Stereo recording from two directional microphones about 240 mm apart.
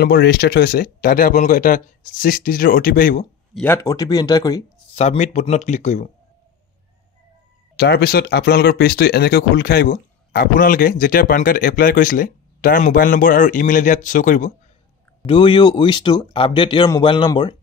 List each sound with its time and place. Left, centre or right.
0.0 s speech: left
3.5 s speech: centre
4.9 s speech: left
7.7 s speech: left
15.2 s speech: left